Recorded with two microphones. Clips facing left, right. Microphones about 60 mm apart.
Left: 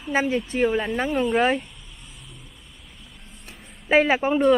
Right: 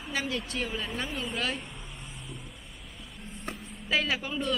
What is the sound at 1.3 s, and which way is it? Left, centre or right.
Speech, left.